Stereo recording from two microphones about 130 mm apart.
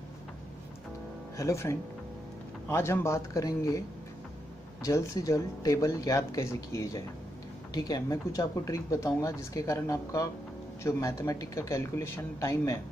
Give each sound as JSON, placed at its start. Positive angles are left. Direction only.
{"t": 1.3, "sound": "speech", "side_deg": 25}
{"t": 4.8, "sound": "speech", "side_deg": 25}